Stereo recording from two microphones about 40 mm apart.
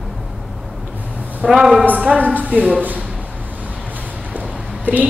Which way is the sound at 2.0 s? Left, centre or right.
Right.